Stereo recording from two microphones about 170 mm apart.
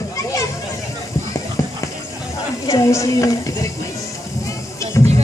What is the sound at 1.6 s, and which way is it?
Clip-clop, 20° left (ahead or behind).